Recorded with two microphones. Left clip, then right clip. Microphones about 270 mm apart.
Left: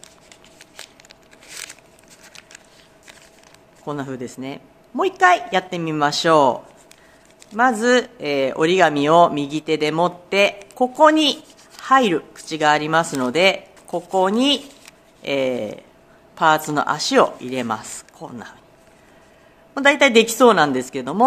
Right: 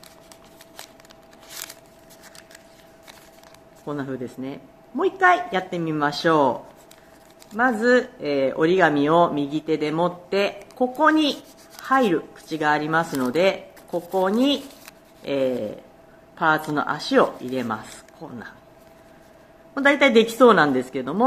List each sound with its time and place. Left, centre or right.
3.8 s speech: left
7.5 s speech: left
19.7 s speech: left